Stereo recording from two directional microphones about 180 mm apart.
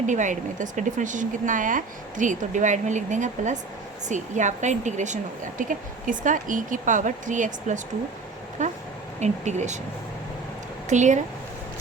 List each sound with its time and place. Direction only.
0.1 s speech: 45° right (ahead or behind)
10.8 s speech: 40° right (ahead or behind)